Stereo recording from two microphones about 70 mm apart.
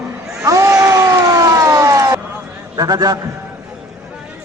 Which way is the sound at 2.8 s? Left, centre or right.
Right.